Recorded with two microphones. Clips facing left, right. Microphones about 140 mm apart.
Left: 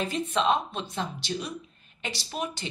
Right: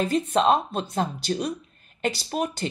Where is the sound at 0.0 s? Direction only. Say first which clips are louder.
Right 5 dB; 45° right (ahead or behind).